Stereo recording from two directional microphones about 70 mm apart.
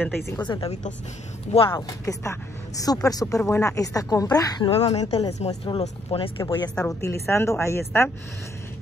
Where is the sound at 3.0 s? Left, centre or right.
Left.